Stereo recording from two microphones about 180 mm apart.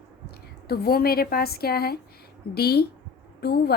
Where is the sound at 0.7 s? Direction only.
60° left (ahead or behind).